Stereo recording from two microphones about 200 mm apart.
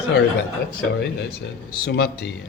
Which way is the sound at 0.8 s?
55° left (ahead or behind).